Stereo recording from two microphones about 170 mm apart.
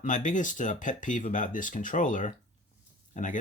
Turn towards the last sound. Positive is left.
turn(degrees=50)  # may be behind; listen again after turning